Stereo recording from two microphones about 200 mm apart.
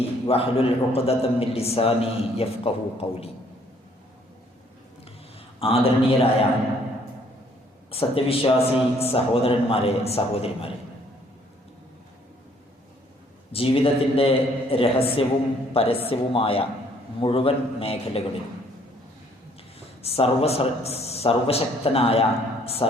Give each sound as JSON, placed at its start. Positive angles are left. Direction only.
{"t": 0.3, "sound": "a man's voice", "side_deg": 30}
{"t": 5.5, "sound": "a man's voice", "side_deg": 30}
{"t": 7.9, "sound": "a man's voice", "side_deg": 30}
{"t": 13.5, "sound": "a man's voice", "side_deg": 30}
{"t": 20.0, "sound": "a man's voice", "side_deg": 30}